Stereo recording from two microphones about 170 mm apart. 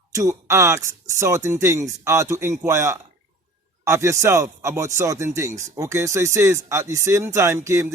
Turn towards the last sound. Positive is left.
turn(degrees=-15)  # may be behind; listen again after turning